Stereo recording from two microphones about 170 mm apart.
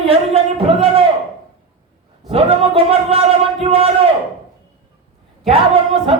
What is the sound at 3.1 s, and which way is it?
Speech, 35° right (ahead or behind).